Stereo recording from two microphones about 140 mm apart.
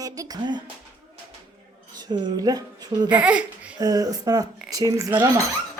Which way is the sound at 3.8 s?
25° right (ahead or behind).